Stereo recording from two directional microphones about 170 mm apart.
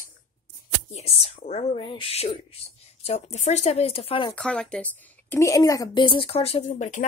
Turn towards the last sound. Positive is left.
turn(degrees=45)  # may be behind; listen again after turning